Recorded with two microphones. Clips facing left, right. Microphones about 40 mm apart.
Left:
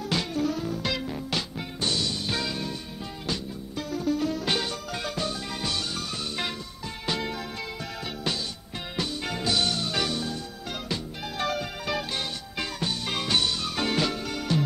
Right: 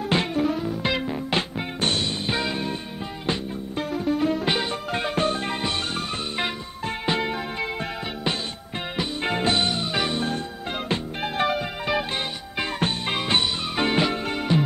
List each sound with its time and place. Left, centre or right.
0.1 s music: right
1.8 s music: right
4.9 s music: right
9.2 s music: right